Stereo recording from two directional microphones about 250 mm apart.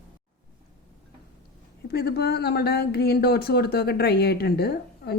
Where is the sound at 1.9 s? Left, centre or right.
Left.